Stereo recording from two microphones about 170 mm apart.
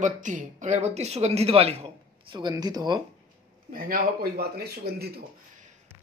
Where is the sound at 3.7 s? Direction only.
60° right (ahead or behind).